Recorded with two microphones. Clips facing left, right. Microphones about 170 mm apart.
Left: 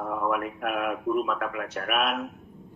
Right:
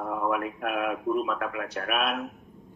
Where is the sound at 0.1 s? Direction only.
20° right (ahead or behind).